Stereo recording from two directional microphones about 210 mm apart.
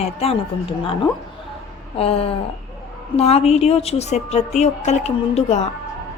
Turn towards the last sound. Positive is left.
turn(degrees=30)  # may be behind; listen again after turning